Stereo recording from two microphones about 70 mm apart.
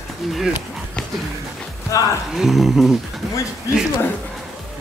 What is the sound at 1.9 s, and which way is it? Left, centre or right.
Speech, left.